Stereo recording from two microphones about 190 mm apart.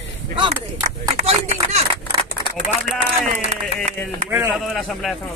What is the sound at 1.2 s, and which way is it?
Speech, 35° right (ahead or behind).